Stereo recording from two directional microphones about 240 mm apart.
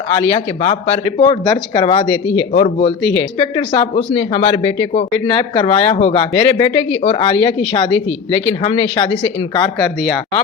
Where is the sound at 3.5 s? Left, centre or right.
Left.